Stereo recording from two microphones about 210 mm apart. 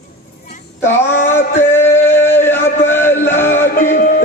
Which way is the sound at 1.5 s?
10° left (ahead or behind).